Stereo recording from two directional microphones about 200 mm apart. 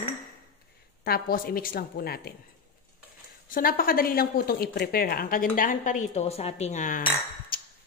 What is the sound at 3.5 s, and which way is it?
A woman's voice, 45° left (ahead or behind).